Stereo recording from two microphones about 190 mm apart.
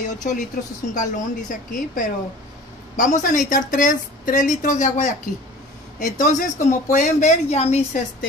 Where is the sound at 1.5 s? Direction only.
45° left (ahead or behind).